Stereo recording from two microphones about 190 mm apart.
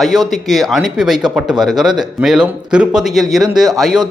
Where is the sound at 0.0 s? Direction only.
Centre (ahead or behind).